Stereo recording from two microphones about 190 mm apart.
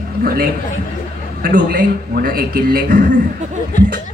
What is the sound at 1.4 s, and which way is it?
A woman's voice, 50° right (ahead or behind).